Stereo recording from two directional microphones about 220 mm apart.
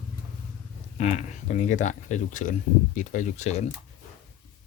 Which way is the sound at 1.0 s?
35° left (ahead or behind).